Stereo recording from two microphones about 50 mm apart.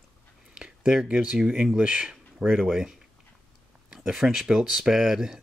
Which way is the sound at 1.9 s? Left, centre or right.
Centre.